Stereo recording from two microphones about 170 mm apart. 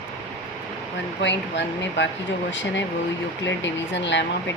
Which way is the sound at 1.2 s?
90° left.